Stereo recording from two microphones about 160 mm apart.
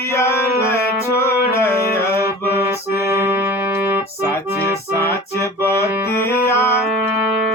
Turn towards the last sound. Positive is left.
turn(degrees=15)  # may be behind; listen again after turning